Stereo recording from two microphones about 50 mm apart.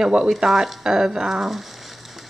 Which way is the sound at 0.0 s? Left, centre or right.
Centre.